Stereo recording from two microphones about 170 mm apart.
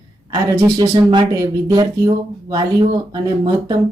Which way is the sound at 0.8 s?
30° right (ahead or behind).